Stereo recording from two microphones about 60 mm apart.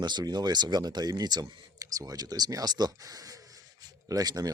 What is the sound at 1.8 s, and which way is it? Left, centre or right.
Speech, right.